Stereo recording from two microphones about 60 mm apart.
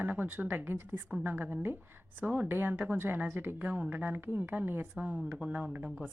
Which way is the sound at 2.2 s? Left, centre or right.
Right.